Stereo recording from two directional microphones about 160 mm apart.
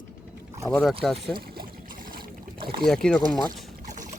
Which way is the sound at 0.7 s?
5° left (ahead or behind).